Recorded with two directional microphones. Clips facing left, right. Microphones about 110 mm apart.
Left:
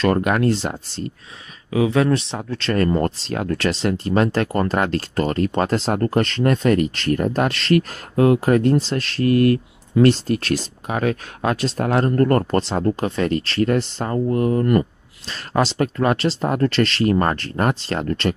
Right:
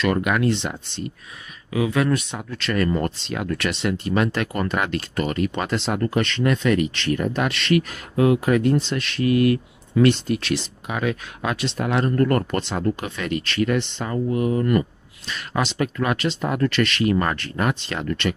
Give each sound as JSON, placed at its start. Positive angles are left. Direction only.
{"t": 0.0, "sound": "speech", "side_deg": 40}